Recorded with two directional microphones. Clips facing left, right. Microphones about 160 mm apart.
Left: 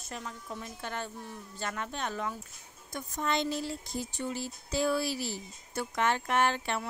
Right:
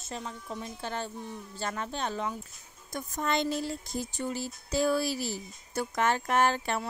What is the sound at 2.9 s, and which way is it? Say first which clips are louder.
Speech: right 2 dB; 45° right (ahead or behind).